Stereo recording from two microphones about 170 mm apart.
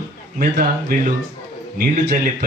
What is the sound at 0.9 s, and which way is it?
Speech, 60° right (ahead or behind).